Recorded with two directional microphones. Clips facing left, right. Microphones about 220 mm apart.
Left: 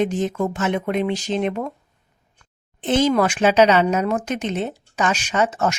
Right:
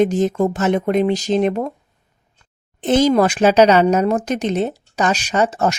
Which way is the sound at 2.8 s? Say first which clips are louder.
Right 4 dB; 40° right (ahead or behind).